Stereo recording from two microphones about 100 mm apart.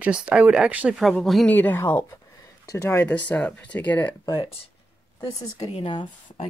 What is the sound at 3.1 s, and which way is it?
Speech, 15° left (ahead or behind).